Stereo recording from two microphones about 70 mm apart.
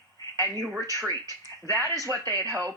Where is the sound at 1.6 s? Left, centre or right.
Right.